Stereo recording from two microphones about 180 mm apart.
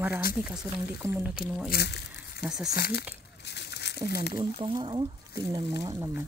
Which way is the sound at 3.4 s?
70° left (ahead or behind).